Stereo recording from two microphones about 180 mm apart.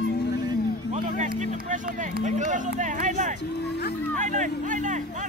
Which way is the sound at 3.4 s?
65° left (ahead or behind).